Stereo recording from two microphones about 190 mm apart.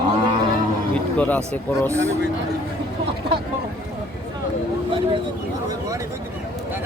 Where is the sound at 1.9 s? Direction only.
15° right (ahead or behind).